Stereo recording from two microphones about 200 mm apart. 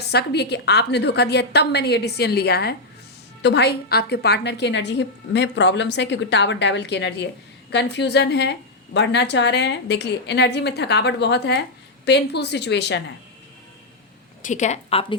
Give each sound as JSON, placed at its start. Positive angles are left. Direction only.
{"t": 0.1, "sound": "a woman's voice", "side_deg": 55}
{"t": 14.4, "sound": "a woman's voice", "side_deg": 35}